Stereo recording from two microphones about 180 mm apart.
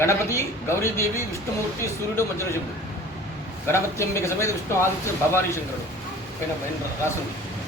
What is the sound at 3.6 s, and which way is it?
Speech, 15° left (ahead or behind).